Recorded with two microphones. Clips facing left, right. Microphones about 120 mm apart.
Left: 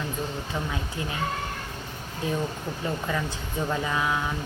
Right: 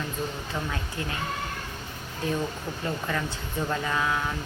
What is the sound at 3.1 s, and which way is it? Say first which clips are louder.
Speech: left 1 dB; 10° left (ahead or behind).